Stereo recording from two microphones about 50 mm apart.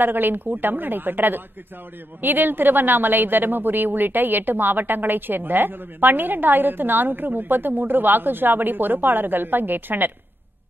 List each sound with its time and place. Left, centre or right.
0.0 s a woman's voice: right